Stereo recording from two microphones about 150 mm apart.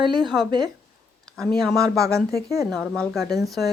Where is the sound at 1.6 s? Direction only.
5° right (ahead or behind).